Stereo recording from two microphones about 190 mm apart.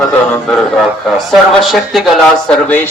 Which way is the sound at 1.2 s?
Centre (ahead or behind).